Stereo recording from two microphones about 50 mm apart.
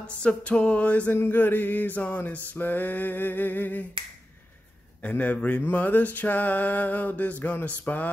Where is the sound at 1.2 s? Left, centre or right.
Left.